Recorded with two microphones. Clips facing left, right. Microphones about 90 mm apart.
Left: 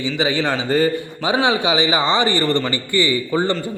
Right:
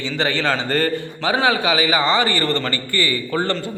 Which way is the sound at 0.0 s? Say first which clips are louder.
Left 1 dB; 15° left (ahead or behind).